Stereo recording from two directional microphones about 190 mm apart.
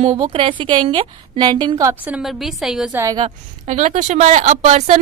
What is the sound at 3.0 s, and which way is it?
Speech, 20° right (ahead or behind).